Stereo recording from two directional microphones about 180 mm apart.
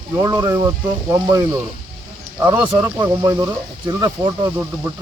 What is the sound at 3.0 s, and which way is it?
Speech, 20° right (ahead or behind).